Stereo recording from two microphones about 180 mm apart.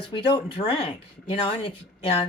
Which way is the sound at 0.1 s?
25° left (ahead or behind).